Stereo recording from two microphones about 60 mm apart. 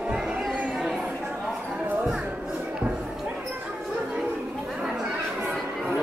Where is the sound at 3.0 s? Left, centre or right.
Centre.